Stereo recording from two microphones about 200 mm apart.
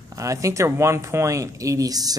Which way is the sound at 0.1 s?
15° right (ahead or behind).